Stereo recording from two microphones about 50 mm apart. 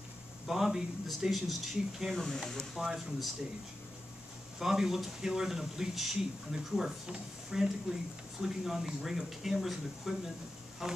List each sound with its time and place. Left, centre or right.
0.5 s speech: centre
4.6 s speech: centre
8.4 s speech: centre